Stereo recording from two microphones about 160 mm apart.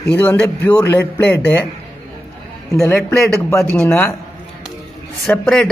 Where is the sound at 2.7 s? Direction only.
5° left (ahead or behind).